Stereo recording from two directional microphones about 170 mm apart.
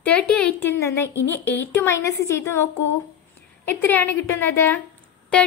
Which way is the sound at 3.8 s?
10° left (ahead or behind).